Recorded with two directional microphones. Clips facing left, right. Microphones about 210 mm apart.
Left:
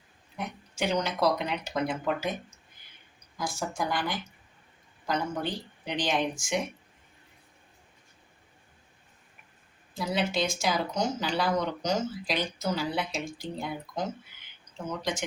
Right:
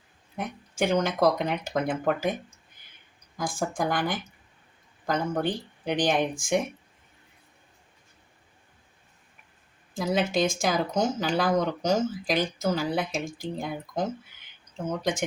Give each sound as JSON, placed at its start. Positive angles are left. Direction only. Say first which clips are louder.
{"t": 0.8, "sound": "speech", "louder": "right 4 dB", "side_deg": -50}
{"t": 3.3, "sound": "speech", "louder": "right 4 dB", "side_deg": -50}
{"t": 9.9, "sound": "speech", "louder": "right 4 dB", "side_deg": -45}